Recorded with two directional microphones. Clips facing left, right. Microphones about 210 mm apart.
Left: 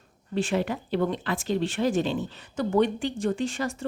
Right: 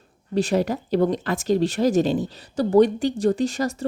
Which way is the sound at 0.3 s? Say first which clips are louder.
Right 5 dB; 40° right (ahead or behind).